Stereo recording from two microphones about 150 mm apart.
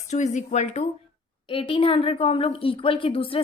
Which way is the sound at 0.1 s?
50° left (ahead or behind).